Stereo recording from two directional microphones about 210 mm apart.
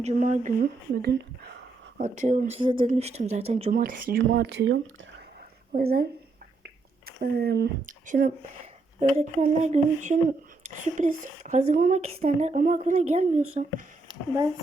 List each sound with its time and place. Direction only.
0.0 s speech: 35° right (ahead or behind)
2.0 s speech: 35° right (ahead or behind)
4.3 s speech: 55° right (ahead or behind)
5.7 s a woman's voice: 45° right (ahead or behind)
6.6 s a sound: 45° right (ahead or behind)
7.9 s speech: 40° right (ahead or behind)